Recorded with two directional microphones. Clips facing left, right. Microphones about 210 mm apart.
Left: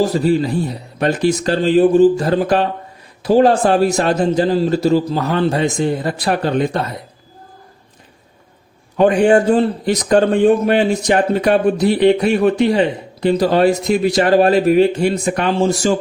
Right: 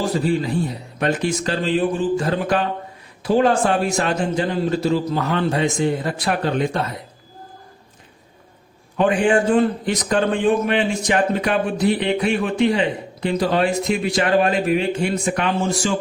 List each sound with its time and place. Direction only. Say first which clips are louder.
0.9 s a man's voice: left 5 dB; 35° left (ahead or behind)
9.0 s a man's voice: left 5 dB; 40° left (ahead or behind)